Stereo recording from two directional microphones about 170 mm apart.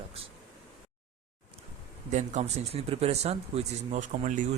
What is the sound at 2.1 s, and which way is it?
A man's voice, 40° right (ahead or behind).